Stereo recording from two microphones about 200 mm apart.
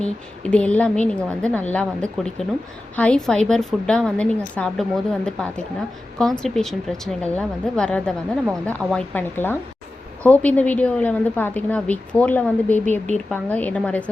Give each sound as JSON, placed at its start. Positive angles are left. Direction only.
{"t": 0.5, "sound": "a woman's voice", "side_deg": 5}
{"t": 12.8, "sound": "speech", "side_deg": -35}
{"t": 13.3, "sound": "a woman's voice", "side_deg": 10}